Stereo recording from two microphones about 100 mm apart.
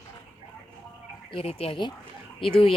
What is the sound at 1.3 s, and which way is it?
Speech, 75° left (ahead or behind).